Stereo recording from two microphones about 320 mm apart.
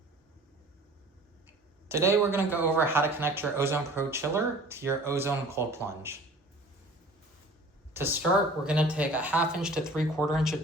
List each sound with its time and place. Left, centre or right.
1.9 s speech: centre
7.9 s speech: centre